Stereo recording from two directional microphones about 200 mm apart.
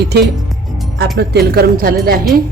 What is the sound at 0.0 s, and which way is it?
Speech, 55° right (ahead or behind).